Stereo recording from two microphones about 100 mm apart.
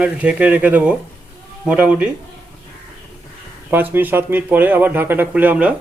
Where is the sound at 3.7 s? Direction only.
20° right (ahead or behind).